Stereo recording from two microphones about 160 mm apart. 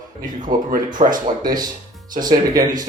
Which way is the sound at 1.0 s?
45° right (ahead or behind).